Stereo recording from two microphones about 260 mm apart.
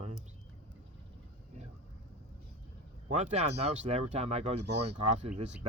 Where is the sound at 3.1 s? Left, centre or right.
Right.